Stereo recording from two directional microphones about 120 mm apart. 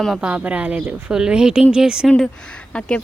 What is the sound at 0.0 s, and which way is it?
Speech, centre (ahead or behind).